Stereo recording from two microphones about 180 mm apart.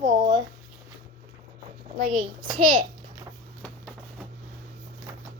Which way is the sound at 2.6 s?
50° right (ahead or behind).